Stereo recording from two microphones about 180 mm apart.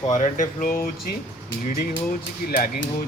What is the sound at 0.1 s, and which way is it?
Speech, 45° left (ahead or behind).